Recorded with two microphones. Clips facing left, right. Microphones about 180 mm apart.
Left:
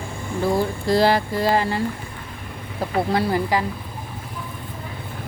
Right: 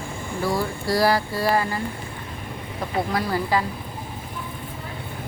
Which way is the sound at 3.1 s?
30° left (ahead or behind).